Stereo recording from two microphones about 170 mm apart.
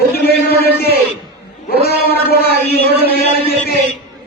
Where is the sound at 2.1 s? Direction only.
65° left (ahead or behind).